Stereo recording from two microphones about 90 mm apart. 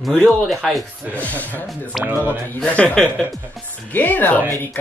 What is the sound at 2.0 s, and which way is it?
Speech, 20° right (ahead or behind).